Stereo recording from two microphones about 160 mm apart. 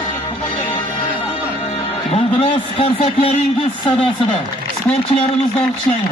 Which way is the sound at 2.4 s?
35° left (ahead or behind).